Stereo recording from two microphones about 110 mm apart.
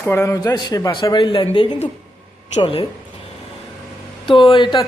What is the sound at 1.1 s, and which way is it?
Speech, 50° left (ahead or behind).